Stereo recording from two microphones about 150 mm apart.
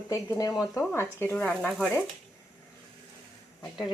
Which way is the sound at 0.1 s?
20° left (ahead or behind).